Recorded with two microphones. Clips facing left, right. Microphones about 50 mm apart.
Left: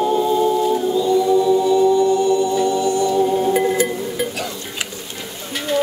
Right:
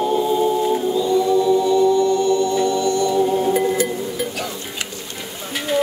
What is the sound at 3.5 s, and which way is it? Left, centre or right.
Music, left.